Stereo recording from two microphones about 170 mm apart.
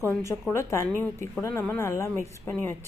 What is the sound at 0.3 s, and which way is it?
A woman's voice, 15° left (ahead or behind).